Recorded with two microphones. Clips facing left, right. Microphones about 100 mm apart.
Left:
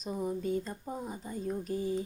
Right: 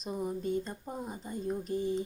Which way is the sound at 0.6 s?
Centre (ahead or behind).